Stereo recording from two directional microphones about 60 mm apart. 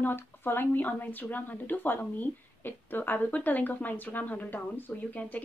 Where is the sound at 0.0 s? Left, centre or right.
Left.